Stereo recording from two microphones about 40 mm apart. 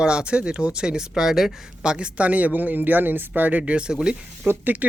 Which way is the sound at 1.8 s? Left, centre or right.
Right.